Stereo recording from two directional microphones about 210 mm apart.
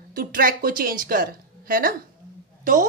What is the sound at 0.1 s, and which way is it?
A woman's voice, 45° right (ahead or behind).